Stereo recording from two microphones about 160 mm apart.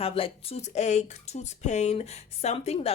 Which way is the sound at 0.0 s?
35° left (ahead or behind).